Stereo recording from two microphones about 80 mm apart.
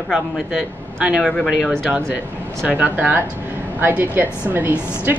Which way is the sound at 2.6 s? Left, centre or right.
Centre.